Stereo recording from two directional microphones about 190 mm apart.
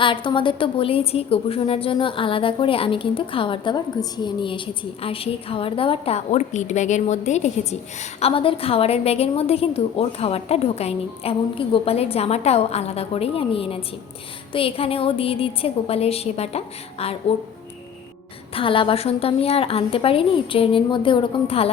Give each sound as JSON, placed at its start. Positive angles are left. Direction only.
{"t": 0.0, "sound": "a woman's voice", "side_deg": 25}
{"t": 18.5, "sound": "a woman's voice", "side_deg": 30}